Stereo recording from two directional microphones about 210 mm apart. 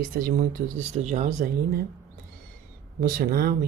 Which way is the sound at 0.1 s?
45° right (ahead or behind).